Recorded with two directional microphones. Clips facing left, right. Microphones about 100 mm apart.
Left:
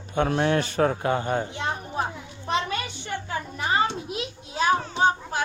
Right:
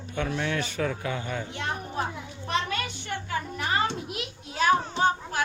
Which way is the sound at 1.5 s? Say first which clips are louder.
Left 2 dB; 20° left (ahead or behind).